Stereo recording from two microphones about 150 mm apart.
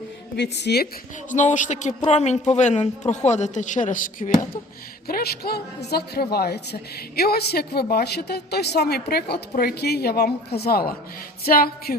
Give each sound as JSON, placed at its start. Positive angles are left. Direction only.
{"t": 0.3, "sound": "a woman's voice", "side_deg": 90}
{"t": 1.3, "sound": "a woman's voice", "side_deg": 55}
{"t": 5.0, "sound": "a woman's voice", "side_deg": 85}